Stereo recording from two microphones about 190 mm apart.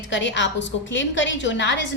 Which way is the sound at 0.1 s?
75° left (ahead or behind).